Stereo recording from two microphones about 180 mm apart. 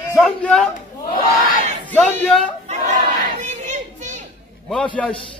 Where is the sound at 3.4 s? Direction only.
40° right (ahead or behind).